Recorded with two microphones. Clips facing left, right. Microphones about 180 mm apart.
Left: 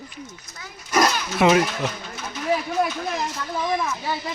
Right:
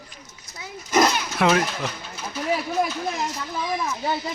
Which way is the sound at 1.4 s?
Centre (ahead or behind).